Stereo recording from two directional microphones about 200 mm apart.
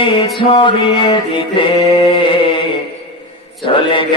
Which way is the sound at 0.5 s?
25° left (ahead or behind).